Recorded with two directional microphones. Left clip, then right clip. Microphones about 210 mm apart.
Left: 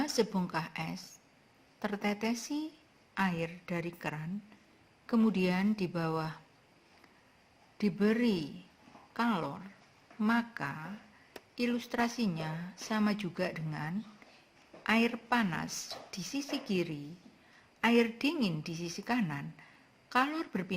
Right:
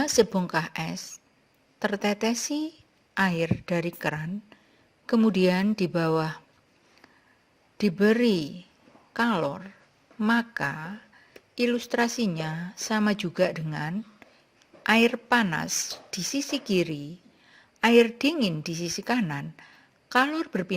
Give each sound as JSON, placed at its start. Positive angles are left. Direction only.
{"t": 0.0, "sound": "a woman's voice", "side_deg": -35}
{"t": 7.8, "sound": "a woman's voice", "side_deg": -35}